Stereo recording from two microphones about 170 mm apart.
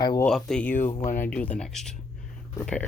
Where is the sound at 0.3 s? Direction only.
5° left (ahead or behind).